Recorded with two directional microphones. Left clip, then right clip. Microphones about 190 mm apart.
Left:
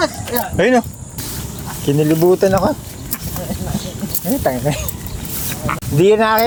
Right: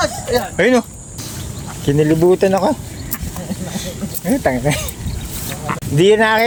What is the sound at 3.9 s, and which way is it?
Snake, 35° right (ahead or behind).